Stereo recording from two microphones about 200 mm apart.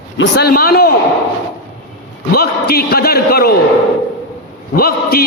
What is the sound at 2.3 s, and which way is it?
A man's voice, 50° left (ahead or behind).